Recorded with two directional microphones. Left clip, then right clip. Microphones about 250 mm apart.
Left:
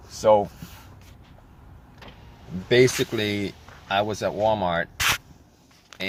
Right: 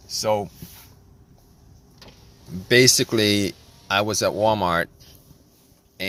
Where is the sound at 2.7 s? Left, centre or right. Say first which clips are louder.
Right 3 dB; right.